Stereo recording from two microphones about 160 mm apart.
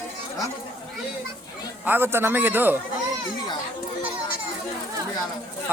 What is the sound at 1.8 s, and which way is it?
Speech, 15° right (ahead or behind).